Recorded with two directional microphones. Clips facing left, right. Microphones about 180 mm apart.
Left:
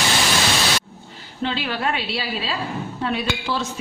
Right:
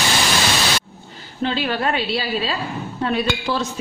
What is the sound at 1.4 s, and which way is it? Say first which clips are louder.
A woman's voice: right 3 dB; 45° right (ahead or behind).